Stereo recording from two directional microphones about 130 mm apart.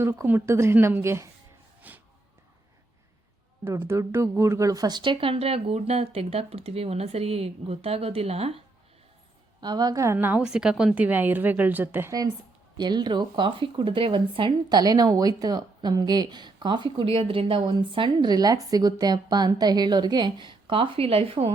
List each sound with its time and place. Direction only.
0.0 s speech: 20° right (ahead or behind)
1.8 s a sound: 10° right (ahead or behind)
3.6 s speech: 20° right (ahead or behind); by 8.6 s 50° right (ahead or behind)
9.6 s a woman's voice: 35° right (ahead or behind); by 12.1 s 15° right (ahead or behind)
12.7 s speech: 35° right (ahead or behind)